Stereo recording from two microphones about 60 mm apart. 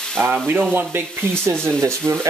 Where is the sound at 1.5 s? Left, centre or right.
Right.